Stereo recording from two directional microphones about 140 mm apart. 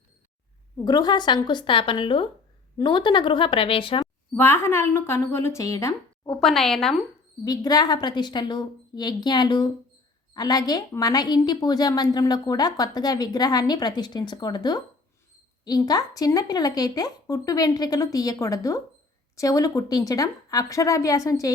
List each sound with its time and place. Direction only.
0.9 s a woman's voice: 30° left (ahead or behind)
4.4 s a woman's voice: 15° left (ahead or behind)
6.4 s speech: centre (ahead or behind)
7.4 s a woman's voice: 30° left (ahead or behind)